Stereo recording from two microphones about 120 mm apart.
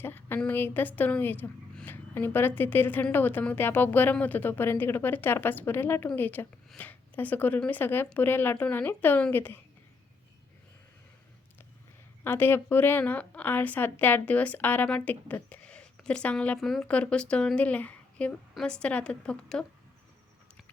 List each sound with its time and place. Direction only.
0.0 s a woman's voice: 15° left (ahead or behind)
12.2 s a woman's voice: 20° left (ahead or behind)